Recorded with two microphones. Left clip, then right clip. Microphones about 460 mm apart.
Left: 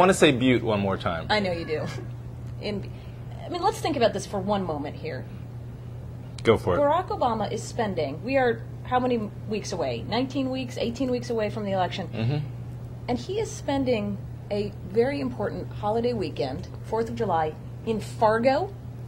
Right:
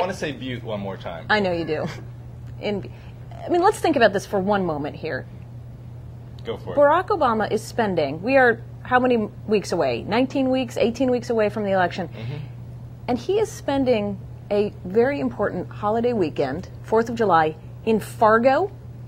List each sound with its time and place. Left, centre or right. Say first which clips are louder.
0.2 s speech: left 10 dB; left
1.2 s a woman's voice: right 9 dB; right
6.4 s speech: left 10 dB; left
6.8 s a woman's voice: right 6 dB; right